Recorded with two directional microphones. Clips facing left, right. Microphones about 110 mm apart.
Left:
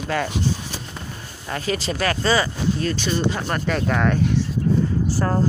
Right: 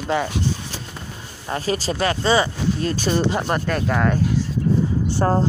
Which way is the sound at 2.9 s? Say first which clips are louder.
Right 3 dB; 45° right (ahead or behind).